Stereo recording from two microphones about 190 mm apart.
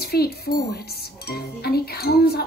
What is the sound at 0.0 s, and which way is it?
Speech, 55° left (ahead or behind).